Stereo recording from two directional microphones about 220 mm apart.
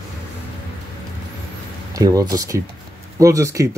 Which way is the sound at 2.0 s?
15° right (ahead or behind).